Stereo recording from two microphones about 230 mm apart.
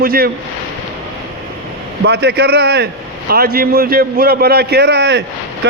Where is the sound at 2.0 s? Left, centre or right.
Right.